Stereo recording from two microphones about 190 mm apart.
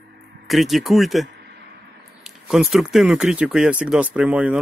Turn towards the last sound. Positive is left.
turn(degrees=-5)  # may be behind; listen again after turning